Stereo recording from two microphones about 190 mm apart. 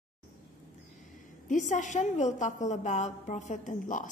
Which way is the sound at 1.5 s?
40° left (ahead or behind).